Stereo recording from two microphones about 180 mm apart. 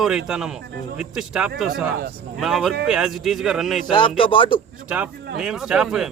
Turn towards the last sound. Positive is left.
turn(degrees=-5)  # may be behind; listen again after turning